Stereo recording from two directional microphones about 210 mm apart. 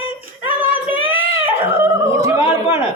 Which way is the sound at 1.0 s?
70° left (ahead or behind).